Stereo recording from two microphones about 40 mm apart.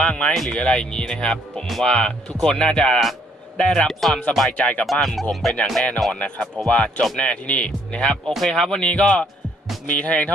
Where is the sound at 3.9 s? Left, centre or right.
Centre.